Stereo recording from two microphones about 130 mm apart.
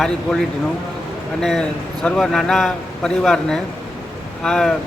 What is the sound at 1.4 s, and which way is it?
A man's voice, 5° left (ahead or behind).